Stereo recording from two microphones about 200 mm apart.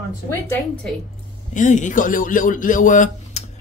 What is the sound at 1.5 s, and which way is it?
Speech, 40° left (ahead or behind).